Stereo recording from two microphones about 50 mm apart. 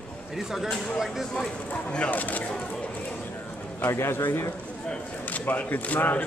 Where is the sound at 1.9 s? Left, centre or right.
Left.